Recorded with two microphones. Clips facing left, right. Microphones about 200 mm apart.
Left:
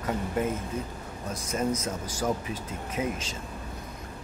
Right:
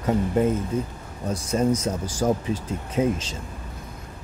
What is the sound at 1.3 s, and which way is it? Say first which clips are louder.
Speech: right 7 dB; 30° right (ahead or behind).